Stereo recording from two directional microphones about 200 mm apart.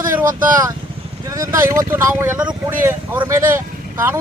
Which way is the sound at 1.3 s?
15° right (ahead or behind).